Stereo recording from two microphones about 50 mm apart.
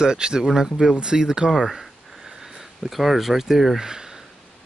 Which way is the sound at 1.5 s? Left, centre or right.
Centre.